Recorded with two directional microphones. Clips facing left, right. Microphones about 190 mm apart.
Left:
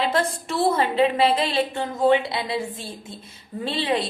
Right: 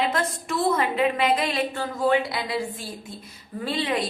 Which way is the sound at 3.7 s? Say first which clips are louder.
Left 2 dB; 30° left (ahead or behind).